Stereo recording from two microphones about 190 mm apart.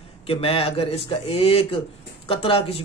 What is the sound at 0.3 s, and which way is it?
A man's voice, 30° left (ahead or behind).